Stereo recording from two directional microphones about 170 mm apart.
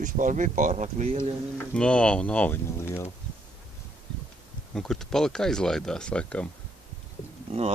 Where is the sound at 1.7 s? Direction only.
5° left (ahead or behind).